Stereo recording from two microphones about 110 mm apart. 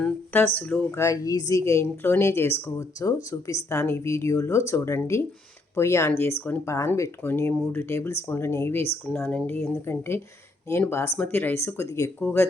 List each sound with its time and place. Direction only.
0.0 s speech: 15° left (ahead or behind)
0.9 s a woman's voice: 30° left (ahead or behind)